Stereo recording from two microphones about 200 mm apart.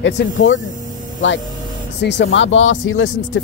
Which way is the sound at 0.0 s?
65° left (ahead or behind).